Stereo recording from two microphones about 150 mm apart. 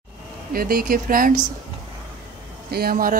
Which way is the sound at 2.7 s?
80° right.